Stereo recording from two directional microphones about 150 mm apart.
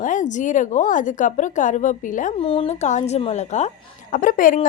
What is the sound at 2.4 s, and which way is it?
A woman's voice, 40° left (ahead or behind).